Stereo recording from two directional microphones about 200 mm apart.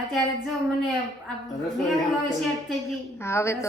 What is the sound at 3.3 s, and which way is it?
Speech, 15° left (ahead or behind).